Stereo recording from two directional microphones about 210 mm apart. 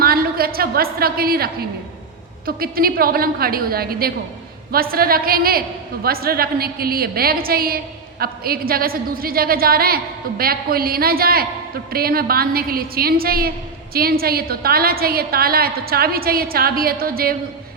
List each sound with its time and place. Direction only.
0.0 s a woman's voice: 45° right (ahead or behind)
2.5 s a woman's voice: 45° right (ahead or behind)